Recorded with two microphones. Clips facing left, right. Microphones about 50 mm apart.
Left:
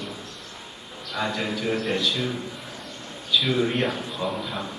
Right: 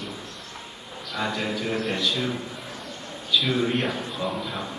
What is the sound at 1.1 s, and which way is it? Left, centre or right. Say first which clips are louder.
Speech: even; centre.